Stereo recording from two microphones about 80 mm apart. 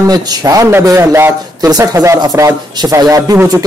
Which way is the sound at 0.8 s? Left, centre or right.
Right.